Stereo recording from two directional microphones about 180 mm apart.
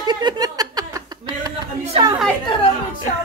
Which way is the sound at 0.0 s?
25° right (ahead or behind).